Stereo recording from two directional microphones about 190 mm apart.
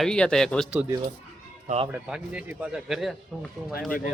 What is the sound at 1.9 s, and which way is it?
Speech, 10° right (ahead or behind).